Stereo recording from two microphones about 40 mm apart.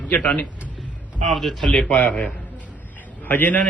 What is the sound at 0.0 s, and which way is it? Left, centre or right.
Speech, left.